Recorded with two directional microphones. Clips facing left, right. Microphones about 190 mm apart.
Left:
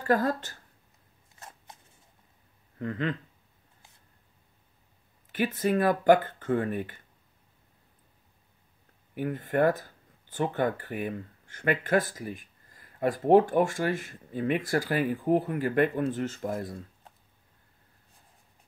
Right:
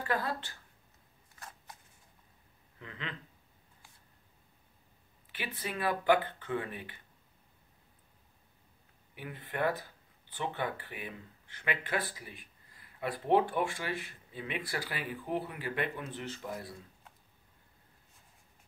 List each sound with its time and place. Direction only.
0.0 s speech: 45° left (ahead or behind)
1.7 s a sound: 25° left (ahead or behind)
2.8 s speech: 45° left (ahead or behind)
5.3 s speech: 45° left (ahead or behind)
9.1 s speech: 45° left (ahead or behind)